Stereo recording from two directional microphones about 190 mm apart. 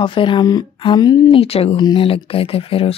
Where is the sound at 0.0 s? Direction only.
25° left (ahead or behind).